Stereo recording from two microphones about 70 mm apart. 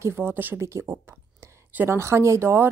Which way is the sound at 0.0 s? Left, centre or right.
Right.